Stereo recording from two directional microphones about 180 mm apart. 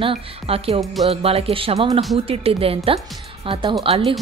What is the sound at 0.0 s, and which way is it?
Speech, 30° right (ahead or behind).